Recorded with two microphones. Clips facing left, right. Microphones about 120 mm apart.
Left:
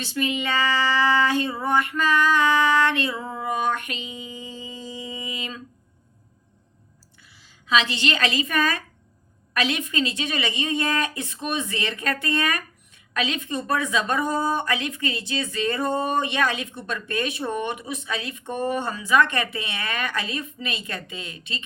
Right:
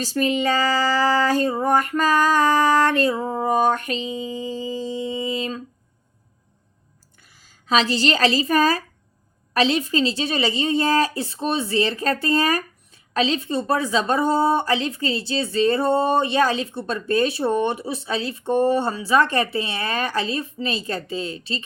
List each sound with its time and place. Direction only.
0.0 s a woman's voice: 40° right (ahead or behind)
7.2 s a woman's voice: 45° right (ahead or behind)